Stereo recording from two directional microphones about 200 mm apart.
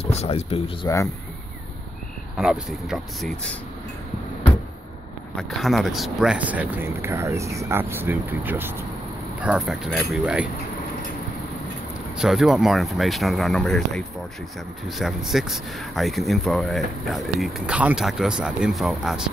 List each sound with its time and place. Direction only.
0.0 s speech: 30° left (ahead or behind)
0.8 s speech: 15° left (ahead or behind)
2.3 s speech: centre (ahead or behind)
5.3 s speech: centre (ahead or behind)
12.2 s speech: centre (ahead or behind)